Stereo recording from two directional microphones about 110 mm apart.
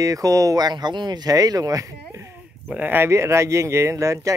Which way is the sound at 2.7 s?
15° right (ahead or behind).